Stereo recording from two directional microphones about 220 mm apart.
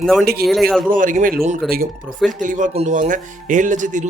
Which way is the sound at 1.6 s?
Centre (ahead or behind).